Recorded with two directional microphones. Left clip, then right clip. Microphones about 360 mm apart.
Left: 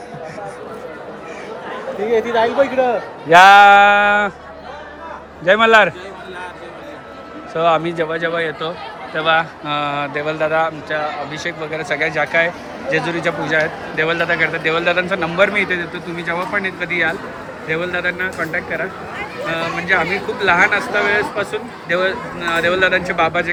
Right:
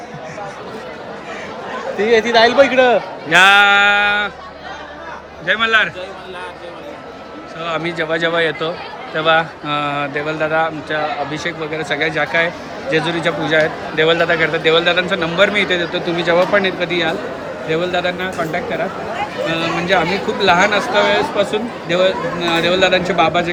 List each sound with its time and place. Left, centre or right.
2.3 s a man's voice: right
3.2 s music: centre
5.5 s music: centre
7.6 s a man's voice: centre